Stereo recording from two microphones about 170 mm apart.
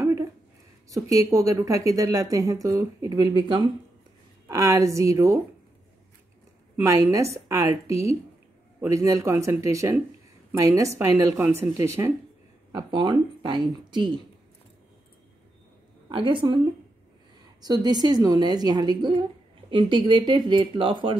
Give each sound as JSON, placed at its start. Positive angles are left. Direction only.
{"t": 0.0, "sound": "a sound", "side_deg": -15}
{"t": 0.8, "sound": "speech", "side_deg": -20}
{"t": 6.8, "sound": "a woman's voice", "side_deg": -20}
{"t": 12.7, "sound": "speech", "side_deg": -25}
{"t": 16.1, "sound": "speech", "side_deg": -30}
{"t": 17.8, "sound": "speech", "side_deg": -25}